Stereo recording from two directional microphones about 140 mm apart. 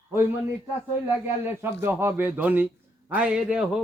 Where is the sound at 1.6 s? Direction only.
15° right (ahead or behind).